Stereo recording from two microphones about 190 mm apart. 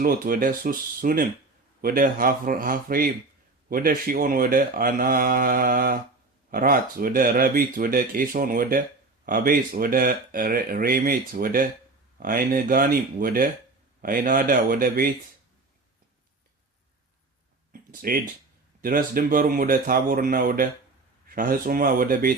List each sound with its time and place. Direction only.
0.0 s speech: 50° right (ahead or behind)
17.7 s a sound: 50° right (ahead or behind)
18.8 s speech: 50° right (ahead or behind)